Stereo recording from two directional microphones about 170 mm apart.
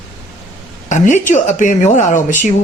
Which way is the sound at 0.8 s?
45° left (ahead or behind).